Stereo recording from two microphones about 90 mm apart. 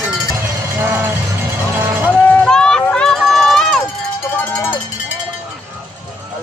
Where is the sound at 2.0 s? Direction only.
20° left (ahead or behind).